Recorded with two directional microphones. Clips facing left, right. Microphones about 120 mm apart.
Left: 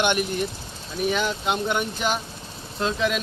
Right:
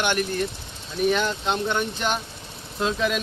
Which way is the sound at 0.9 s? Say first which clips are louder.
Right 2 dB; centre (ahead or behind).